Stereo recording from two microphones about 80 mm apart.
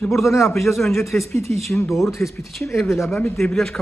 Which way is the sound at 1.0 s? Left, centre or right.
Left.